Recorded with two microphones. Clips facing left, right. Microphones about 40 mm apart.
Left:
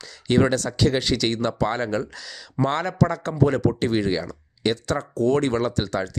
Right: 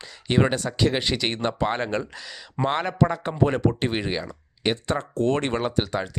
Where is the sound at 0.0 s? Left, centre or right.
Centre.